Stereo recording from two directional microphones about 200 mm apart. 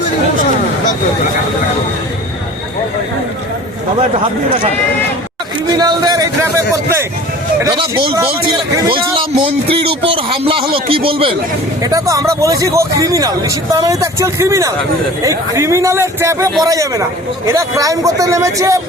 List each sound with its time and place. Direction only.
5.7 s a man's voice: 20° right (ahead or behind)
7.6 s a man's voice: 25° right (ahead or behind)